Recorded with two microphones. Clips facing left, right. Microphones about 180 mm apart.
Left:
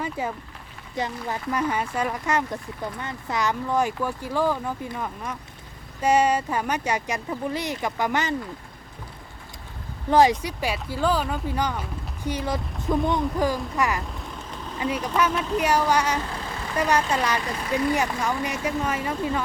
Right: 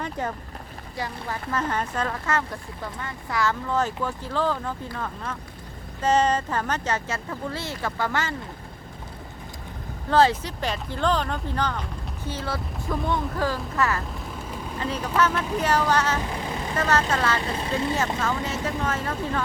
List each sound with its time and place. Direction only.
0.0 s speech: 5° left (ahead or behind)
0.9 s speech: 20° left (ahead or behind)
10.1 s speech: 15° left (ahead or behind)
16.2 s vehicle: 15° right (ahead or behind)
16.7 s speech: 15° left (ahead or behind)
17.6 s speech: 25° right (ahead or behind)
18.4 s speech: 15° left (ahead or behind)